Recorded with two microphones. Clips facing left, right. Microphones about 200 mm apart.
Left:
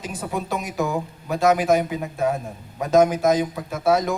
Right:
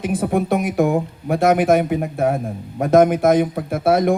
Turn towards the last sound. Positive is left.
turn(degrees=-55)  # may be behind; listen again after turning